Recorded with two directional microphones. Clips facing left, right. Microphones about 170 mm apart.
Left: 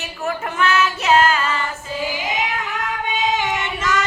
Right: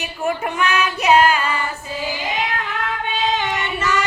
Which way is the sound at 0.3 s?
15° right (ahead or behind).